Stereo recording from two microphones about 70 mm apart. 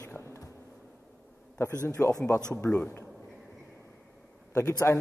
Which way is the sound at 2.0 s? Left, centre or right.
Left.